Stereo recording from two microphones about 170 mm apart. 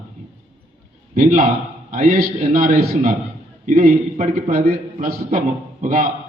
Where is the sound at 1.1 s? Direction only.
55° right (ahead or behind).